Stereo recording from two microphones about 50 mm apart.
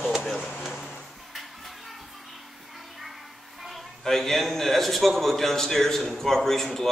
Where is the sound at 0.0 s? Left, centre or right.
Centre.